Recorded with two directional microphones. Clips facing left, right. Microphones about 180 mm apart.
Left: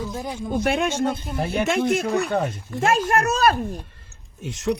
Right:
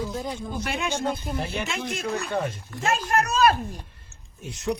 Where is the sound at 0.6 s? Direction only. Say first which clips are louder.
Left 6 dB; 55° left (ahead or behind).